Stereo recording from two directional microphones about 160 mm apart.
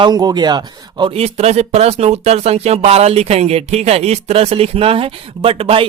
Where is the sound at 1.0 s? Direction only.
40° right (ahead or behind).